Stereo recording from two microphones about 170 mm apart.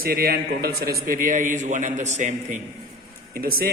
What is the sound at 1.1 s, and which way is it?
A man's voice, 50° right (ahead or behind).